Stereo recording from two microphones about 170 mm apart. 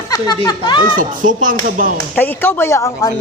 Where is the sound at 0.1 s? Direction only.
25° left (ahead or behind).